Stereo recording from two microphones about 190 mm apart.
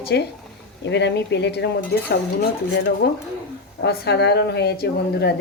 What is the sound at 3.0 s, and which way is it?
Speech, 60° left (ahead or behind).